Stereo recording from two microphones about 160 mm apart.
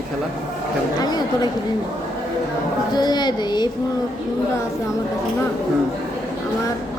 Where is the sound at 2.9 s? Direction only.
25° left (ahead or behind).